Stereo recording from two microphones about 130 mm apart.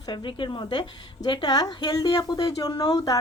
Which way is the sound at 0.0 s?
35° left (ahead or behind).